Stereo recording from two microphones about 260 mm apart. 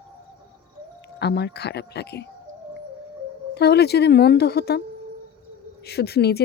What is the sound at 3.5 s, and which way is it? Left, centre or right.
A woman's voice, left.